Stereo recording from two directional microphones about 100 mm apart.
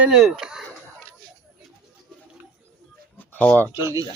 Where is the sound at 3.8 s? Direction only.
35° right (ahead or behind).